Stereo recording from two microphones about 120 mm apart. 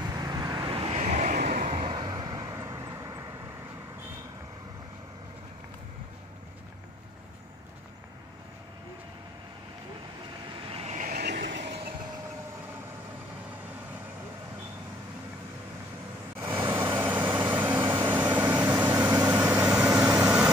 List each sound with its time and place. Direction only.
0.1 s vehicle: 30° right (ahead or behind)
0.7 s vehicle: 55° right (ahead or behind); by 1.8 s 90° right
1.8 s vehicle: 40° right (ahead or behind)
10.7 s vehicle: 60° right (ahead or behind); by 11.6 s 90° right
16.3 s vehicle: 20° right (ahead or behind)